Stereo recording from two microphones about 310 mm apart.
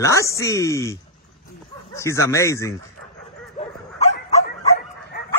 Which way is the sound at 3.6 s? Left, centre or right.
Left.